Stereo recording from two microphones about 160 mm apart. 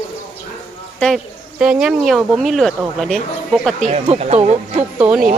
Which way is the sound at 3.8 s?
45° right (ahead or behind).